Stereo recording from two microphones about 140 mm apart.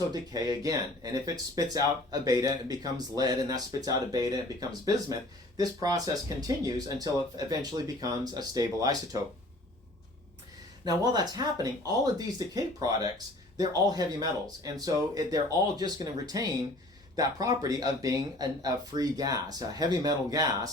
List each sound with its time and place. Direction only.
0.1 s speech: 30° right (ahead or behind)
10.8 s speech: 30° right (ahead or behind)